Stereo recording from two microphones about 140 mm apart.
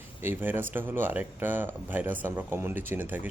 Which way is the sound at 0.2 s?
15° right (ahead or behind).